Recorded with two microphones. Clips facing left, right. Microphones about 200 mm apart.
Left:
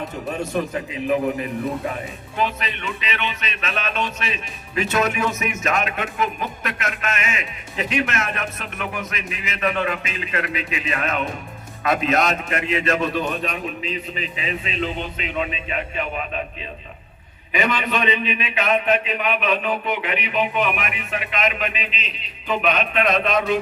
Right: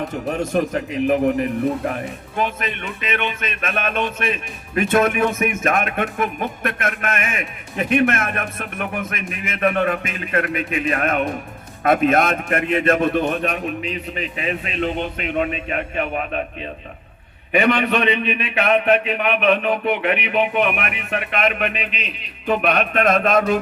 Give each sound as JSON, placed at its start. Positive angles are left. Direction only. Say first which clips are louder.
{"t": 0.5, "sound": "speech", "louder": "right 4 dB", "side_deg": -45}
{"t": 17.5, "sound": "a man's voice", "louder": "right 5 dB", "side_deg": -60}